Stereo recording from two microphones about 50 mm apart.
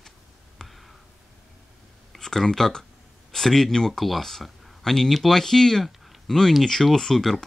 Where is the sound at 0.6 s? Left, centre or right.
Centre.